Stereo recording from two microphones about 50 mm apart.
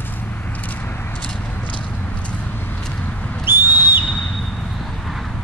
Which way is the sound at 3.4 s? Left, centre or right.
Right.